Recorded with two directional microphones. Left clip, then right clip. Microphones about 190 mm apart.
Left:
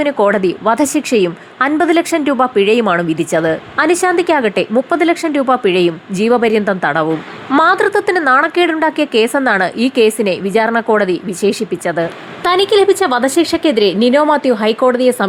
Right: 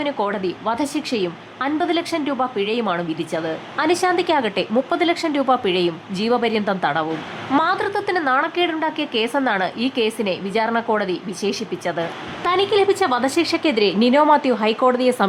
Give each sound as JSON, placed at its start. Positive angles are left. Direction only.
{"t": 0.0, "sound": "a woman's voice", "side_deg": 25}
{"t": 3.8, "sound": "a woman's voice", "side_deg": 20}